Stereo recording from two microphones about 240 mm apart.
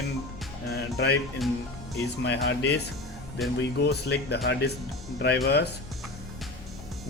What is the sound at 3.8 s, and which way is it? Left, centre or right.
Speech, left.